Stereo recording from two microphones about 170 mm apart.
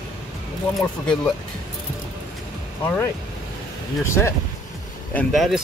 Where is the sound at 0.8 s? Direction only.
5° left (ahead or behind).